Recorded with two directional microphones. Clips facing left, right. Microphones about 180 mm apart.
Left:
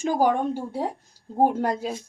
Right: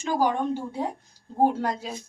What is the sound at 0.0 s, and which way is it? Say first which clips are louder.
A woman's voice: left 3 dB; 50° left (ahead or behind).